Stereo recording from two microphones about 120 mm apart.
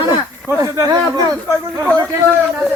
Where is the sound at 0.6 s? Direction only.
25° right (ahead or behind).